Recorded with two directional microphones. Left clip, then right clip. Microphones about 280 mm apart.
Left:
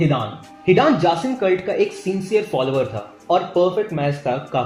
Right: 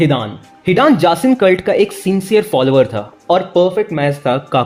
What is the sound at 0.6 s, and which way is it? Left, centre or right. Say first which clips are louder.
Speech: right 4 dB; right.